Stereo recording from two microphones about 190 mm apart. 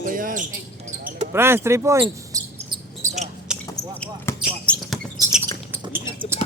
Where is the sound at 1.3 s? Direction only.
10° right (ahead or behind).